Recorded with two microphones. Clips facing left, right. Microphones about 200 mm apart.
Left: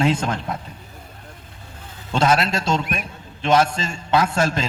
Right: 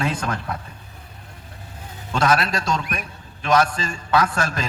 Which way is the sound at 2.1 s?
25° left (ahead or behind).